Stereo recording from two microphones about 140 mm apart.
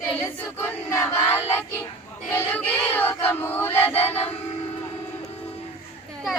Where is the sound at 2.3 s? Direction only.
10° left (ahead or behind).